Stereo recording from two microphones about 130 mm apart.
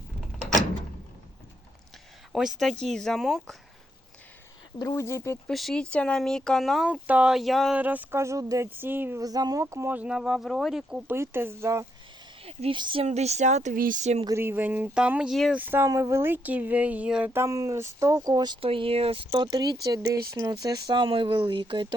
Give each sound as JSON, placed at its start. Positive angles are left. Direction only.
{"t": 2.3, "sound": "speech", "side_deg": 0}
{"t": 4.8, "sound": "speech", "side_deg": 25}
{"t": 5.5, "sound": "speech", "side_deg": 0}
{"t": 7.8, "sound": "speech", "side_deg": -15}
{"t": 9.2, "sound": "speech", "side_deg": -30}
{"t": 11.1, "sound": "speech", "side_deg": -20}
{"t": 12.7, "sound": "speech", "side_deg": -40}
{"t": 13.1, "sound": "speech", "side_deg": -60}
{"t": 14.3, "sound": "speech", "side_deg": -20}
{"t": 15.5, "sound": "speech", "side_deg": -15}
{"t": 18.6, "sound": "speech", "side_deg": -45}